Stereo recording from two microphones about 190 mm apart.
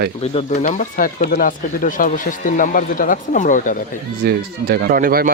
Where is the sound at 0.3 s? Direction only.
40° left (ahead or behind).